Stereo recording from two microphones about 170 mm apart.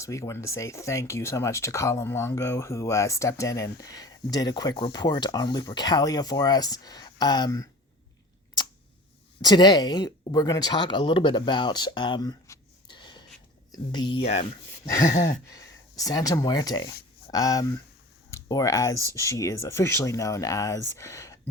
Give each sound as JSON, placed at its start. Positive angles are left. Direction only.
{"t": 0.0, "sound": "speech", "side_deg": 15}
{"t": 9.4, "sound": "speech", "side_deg": 25}
{"t": 15.5, "sound": "speech", "side_deg": 20}